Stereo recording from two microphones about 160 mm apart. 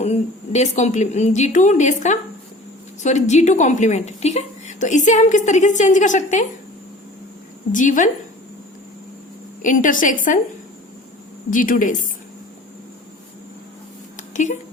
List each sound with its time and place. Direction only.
0.0 s a woman's voice: 45° left (ahead or behind)
7.7 s a woman's voice: 55° left (ahead or behind)
9.6 s a woman's voice: 55° left (ahead or behind)
11.5 s a woman's voice: 55° left (ahead or behind)
14.3 s a woman's voice: 50° left (ahead or behind)